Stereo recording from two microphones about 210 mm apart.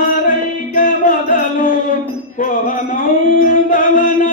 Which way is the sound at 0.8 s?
40° left (ahead or behind).